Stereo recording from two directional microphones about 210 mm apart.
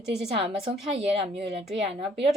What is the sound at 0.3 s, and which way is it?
Speech, 25° right (ahead or behind).